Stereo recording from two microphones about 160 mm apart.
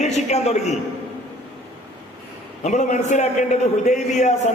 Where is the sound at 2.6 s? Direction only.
45° left (ahead or behind).